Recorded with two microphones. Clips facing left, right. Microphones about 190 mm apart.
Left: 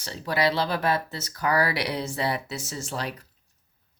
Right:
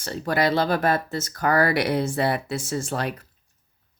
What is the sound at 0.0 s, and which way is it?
Speech, 50° right (ahead or behind).